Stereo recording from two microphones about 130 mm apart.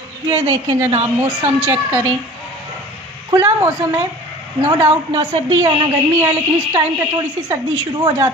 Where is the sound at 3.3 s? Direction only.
30° right (ahead or behind).